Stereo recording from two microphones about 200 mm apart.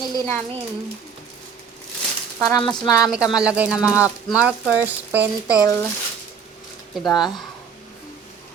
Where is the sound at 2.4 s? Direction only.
20° left (ahead or behind).